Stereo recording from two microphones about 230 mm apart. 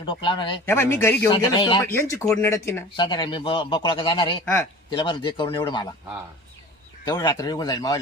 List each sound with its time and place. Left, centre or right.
0.0 s speech: left
7.1 s speech: centre